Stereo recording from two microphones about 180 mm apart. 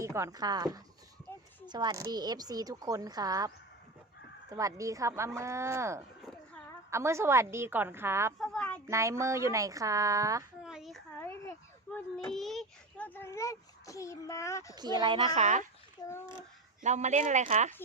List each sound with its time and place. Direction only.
0.0 s a woman's voice: 15° right (ahead or behind)
8.4 s a sound: 5° left (ahead or behind)
8.9 s speech: 15° right (ahead or behind)
10.6 s child singing: 5° right (ahead or behind)
11.2 s a sound: 10° left (ahead or behind)
12.1 s a child's voice: centre (ahead or behind)
14.8 s a woman's voice: 25° right (ahead or behind)
15.4 s speech: 40° right (ahead or behind)
16.0 s a child's voice: 20° left (ahead or behind)
16.8 s speech: 40° right (ahead or behind)